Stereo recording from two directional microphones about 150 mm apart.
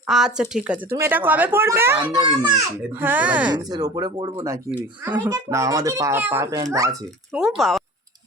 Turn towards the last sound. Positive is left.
turn(degrees=0)  # may be behind; listen again after turning